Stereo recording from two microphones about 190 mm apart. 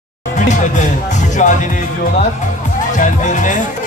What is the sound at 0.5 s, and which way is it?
Music, 40° left (ahead or behind).